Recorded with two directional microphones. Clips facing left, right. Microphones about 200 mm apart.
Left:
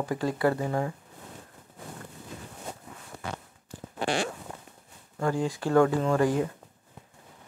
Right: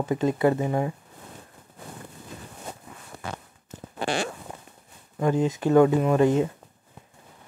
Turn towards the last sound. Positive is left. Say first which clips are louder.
# right 4 dB
turn(degrees=-20)  # may be behind; listen again after turning